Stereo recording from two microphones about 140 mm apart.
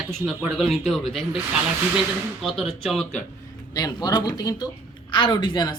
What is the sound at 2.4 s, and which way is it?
Speech, centre (ahead or behind).